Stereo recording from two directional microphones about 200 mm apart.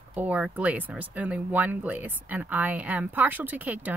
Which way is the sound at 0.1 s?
5° right (ahead or behind).